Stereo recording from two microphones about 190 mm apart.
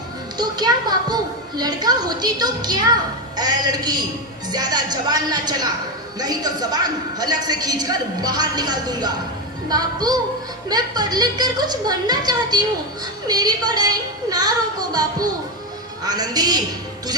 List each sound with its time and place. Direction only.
0.3 s a child's voice: 20° right (ahead or behind)